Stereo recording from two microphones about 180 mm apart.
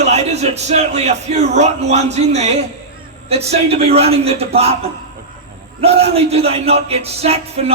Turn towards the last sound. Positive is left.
turn(degrees=-35)  # may be behind; listen again after turning